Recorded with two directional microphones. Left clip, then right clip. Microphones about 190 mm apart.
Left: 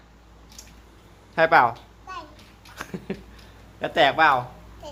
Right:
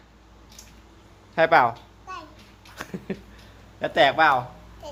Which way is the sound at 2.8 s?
10° right (ahead or behind).